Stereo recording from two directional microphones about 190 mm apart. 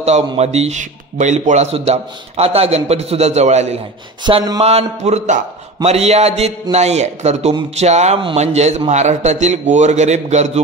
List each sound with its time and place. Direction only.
0.0 s speech: 35° right (ahead or behind)
4.2 s speech: 25° right (ahead or behind)